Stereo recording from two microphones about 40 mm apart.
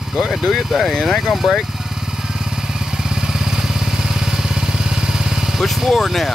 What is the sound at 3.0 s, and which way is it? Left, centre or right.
Vehicle, centre.